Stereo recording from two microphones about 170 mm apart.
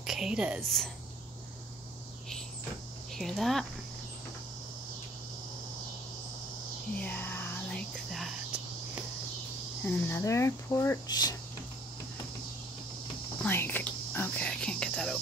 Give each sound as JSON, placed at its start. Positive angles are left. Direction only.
{"t": 0.0, "sound": "a woman's voice", "side_deg": -5}
{"t": 3.2, "sound": "speech", "side_deg": 0}
{"t": 7.0, "sound": "a sound", "side_deg": 10}
{"t": 9.8, "sound": "speech", "side_deg": 15}
{"t": 13.4, "sound": "cricket", "side_deg": 10}